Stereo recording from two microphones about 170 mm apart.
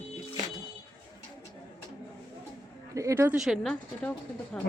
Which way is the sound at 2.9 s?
20° right (ahead or behind).